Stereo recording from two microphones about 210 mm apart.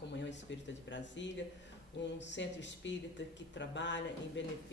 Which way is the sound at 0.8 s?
60° left (ahead or behind).